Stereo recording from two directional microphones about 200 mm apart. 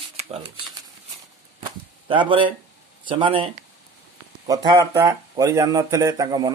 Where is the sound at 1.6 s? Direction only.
25° right (ahead or behind).